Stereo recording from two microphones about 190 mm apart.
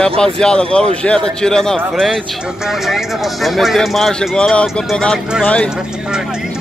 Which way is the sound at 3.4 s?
Centre (ahead or behind).